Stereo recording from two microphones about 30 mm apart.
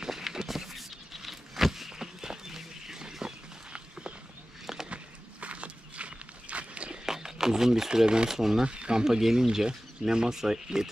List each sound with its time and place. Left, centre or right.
0.0 s walk: centre
0.5 s a sound: centre
4.8 s walk: right
7.1 s speech: centre
8.3 s speech: centre
8.6 s speech: right
8.9 s speech: centre